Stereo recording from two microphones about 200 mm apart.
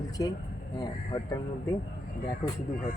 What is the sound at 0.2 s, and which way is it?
Speech, 15° left (ahead or behind).